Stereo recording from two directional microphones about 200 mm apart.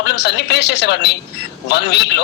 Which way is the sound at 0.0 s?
55° left (ahead or behind).